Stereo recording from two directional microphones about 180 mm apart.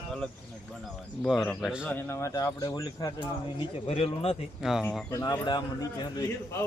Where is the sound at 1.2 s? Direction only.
Centre (ahead or behind).